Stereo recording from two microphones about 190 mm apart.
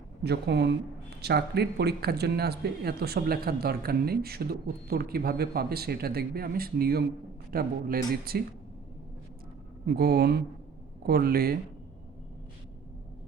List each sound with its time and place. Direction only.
0.2 s speech: 60° right (ahead or behind)
9.8 s speech: 55° right (ahead or behind)